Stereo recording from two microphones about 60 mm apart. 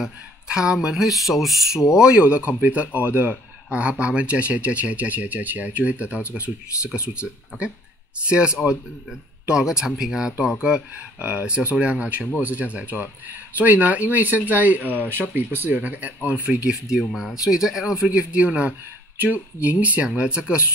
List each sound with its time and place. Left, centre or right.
0.0 s speech: centre
2.0 s speech: centre
8.6 s speech: left
9.5 s speech: centre
17.0 s speech: centre